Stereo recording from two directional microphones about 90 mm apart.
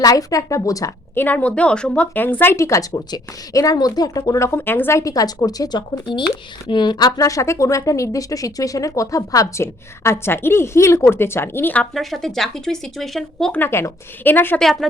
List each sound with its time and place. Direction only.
0.0 s speech: 40° left (ahead or behind)
1.1 s speech: 20° left (ahead or behind)
2.1 s a woman's voice: 20° left (ahead or behind); by 7.1 s 60° left (ahead or behind)
7.2 s speech: 35° left (ahead or behind); by 11.9 s 20° left (ahead or behind)
11.9 s speech: 5° left (ahead or behind)
13.5 s a woman's voice: 25° left (ahead or behind)
14.6 s speech: centre (ahead or behind)